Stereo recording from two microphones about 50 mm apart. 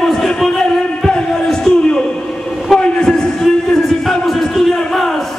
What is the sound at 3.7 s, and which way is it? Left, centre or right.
Music, centre.